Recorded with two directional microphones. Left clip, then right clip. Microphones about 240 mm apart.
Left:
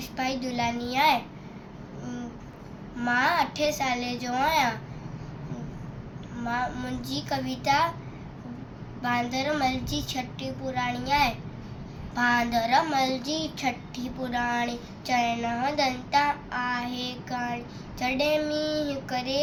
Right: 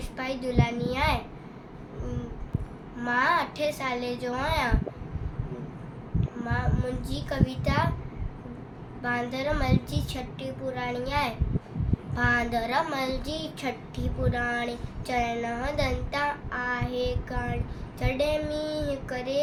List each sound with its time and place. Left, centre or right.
0.2 s a child's voice: centre
3.0 s a child's voice: centre
6.5 s a child's voice: centre
9.0 s a child's voice: centre